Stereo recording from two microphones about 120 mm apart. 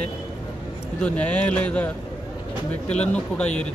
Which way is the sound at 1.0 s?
10° left (ahead or behind).